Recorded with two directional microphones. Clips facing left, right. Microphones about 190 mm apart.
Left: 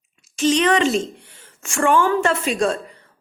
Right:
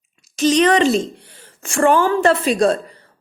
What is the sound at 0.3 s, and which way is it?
Speech, 40° right (ahead or behind).